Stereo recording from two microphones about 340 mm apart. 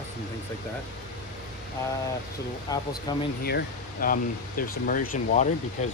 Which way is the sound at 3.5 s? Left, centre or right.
Left.